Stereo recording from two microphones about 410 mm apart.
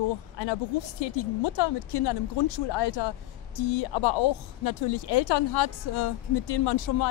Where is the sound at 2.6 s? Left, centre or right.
Left.